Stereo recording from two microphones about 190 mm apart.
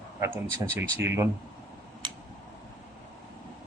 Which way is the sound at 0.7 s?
15° right (ahead or behind).